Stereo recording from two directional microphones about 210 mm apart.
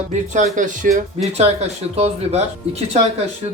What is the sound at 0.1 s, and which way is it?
Speech, 35° right (ahead or behind).